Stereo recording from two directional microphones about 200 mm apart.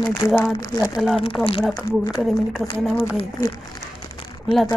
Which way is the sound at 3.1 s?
20° left (ahead or behind).